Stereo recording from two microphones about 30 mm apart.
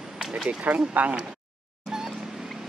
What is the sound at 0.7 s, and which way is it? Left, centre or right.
Speech, right.